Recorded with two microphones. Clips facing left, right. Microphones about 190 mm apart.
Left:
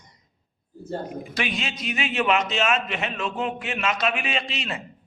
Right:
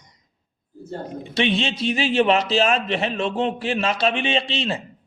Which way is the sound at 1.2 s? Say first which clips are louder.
Right 7 dB; 25° right (ahead or behind).